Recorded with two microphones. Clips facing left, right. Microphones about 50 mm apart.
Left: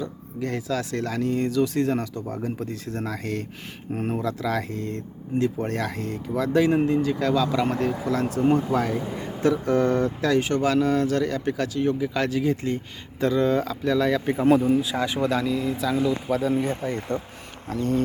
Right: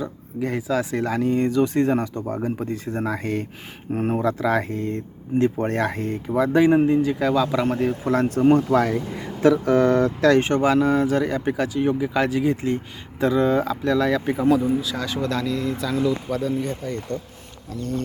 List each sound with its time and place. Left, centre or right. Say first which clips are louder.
0.0 s speech: right 3 dB; centre
6.7 s speech: right 3 dB; centre
8.0 s speech: right 6 dB; right
8.7 s speech: right 4 dB; right
10.4 s speech: right 3 dB; right
10.7 s speech: right 1 dB; centre
14.8 s speech: left 2 dB; left